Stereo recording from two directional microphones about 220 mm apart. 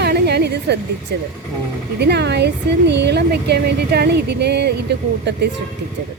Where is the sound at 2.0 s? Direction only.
50° right (ahead or behind).